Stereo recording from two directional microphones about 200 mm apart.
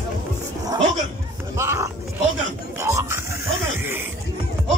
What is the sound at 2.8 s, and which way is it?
Music, 15° right (ahead or behind).